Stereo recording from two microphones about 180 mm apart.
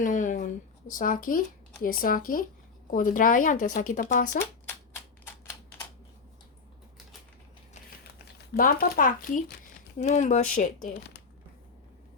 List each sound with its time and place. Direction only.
0.0 s a sound: 45° left (ahead or behind)
1.8 s speech: 50° left (ahead or behind)
8.2 s speech: 55° left (ahead or behind)
10.9 s speech: 70° left (ahead or behind)